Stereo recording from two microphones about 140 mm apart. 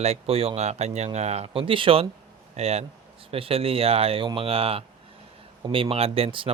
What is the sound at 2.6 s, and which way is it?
A man's voice, 50° right (ahead or behind).